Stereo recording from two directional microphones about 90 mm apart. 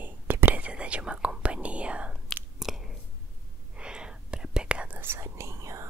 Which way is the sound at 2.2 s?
5° right (ahead or behind).